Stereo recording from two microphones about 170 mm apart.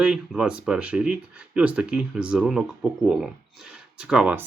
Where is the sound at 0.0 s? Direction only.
5° right (ahead or behind).